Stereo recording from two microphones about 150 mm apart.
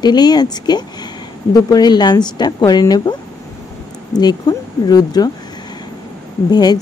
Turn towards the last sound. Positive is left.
turn(degrees=25)  # may be behind; listen again after turning